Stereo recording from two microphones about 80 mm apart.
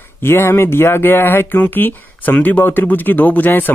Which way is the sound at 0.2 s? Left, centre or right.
Left.